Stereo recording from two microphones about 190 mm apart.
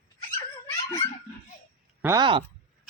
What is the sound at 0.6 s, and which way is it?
Dog, 20° left (ahead or behind).